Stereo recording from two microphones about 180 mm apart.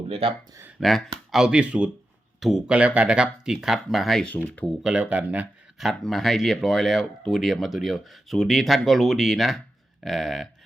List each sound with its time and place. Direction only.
0.1 s speech: 30° right (ahead or behind)
0.8 s speech: centre (ahead or behind)
4.8 s speech: 5° right (ahead or behind)